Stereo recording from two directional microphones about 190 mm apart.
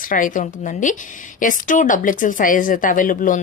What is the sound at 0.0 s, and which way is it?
Speech, 45° left (ahead or behind).